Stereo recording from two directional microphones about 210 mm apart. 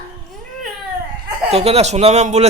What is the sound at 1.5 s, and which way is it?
Speech, 30° right (ahead or behind).